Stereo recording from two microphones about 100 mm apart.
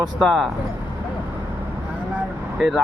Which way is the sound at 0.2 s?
5° left (ahead or behind).